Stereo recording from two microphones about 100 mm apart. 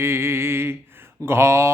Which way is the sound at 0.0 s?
25° right (ahead or behind).